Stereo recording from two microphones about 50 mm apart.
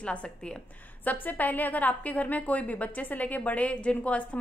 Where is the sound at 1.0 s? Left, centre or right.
Left.